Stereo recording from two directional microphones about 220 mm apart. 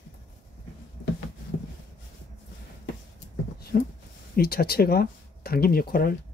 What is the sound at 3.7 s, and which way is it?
Speech, 40° left (ahead or behind).